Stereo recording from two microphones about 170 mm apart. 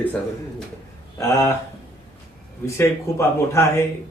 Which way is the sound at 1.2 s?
15° left (ahead or behind).